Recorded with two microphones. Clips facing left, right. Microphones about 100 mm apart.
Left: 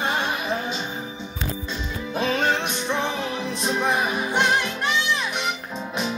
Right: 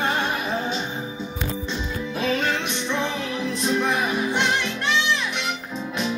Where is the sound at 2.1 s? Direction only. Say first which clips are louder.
Left 2 dB; 45° left (ahead or behind).